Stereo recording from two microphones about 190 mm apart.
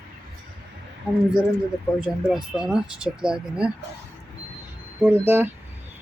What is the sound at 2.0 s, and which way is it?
Speech, 5° right (ahead or behind).